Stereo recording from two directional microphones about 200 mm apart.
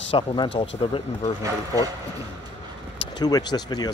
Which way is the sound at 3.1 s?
20° left (ahead or behind).